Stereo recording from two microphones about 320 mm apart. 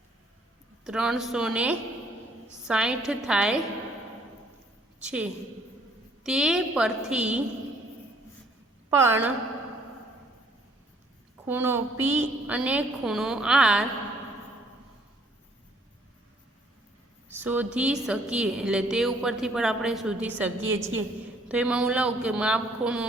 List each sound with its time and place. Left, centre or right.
0.9 s a woman's voice: centre
5.0 s a woman's voice: centre
8.9 s a woman's voice: centre
11.4 s a woman's voice: centre
17.2 s a woman's voice: centre